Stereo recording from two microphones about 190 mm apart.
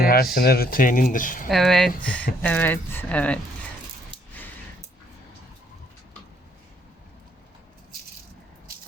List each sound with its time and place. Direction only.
0.0 s a sound: 55° left (ahead or behind)
0.3 s speech: 55° left (ahead or behind)
1.5 s speech: centre (ahead or behind)